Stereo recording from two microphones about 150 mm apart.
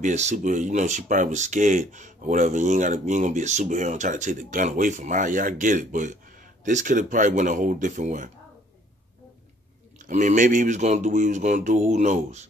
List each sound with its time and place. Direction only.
0.0 s speech: 50° right (ahead or behind)
9.9 s speech: 55° right (ahead or behind)